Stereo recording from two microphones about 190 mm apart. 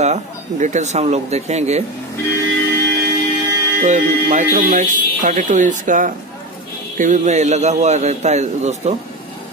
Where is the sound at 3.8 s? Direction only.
40° right (ahead or behind).